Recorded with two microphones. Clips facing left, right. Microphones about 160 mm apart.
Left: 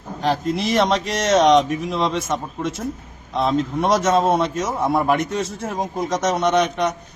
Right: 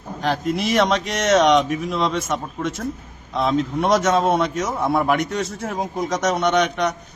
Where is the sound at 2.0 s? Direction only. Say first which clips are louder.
Left 1 dB; centre (ahead or behind).